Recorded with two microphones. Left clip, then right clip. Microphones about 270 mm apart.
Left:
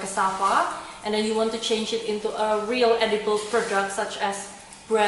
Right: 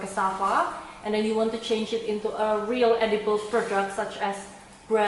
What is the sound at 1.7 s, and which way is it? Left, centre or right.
Speech, centre.